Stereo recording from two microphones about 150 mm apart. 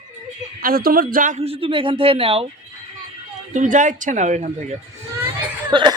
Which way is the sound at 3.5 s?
60° right (ahead or behind).